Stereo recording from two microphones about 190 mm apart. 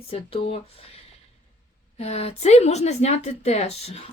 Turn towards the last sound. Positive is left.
turn(degrees=35)  # may be behind; listen again after turning